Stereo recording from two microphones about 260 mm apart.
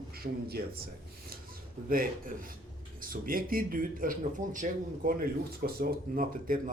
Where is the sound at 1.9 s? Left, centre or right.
Right.